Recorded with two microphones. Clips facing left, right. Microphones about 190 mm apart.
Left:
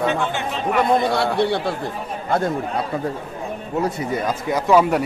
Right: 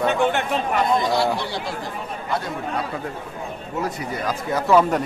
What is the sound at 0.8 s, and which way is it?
Speech, 60° left (ahead or behind).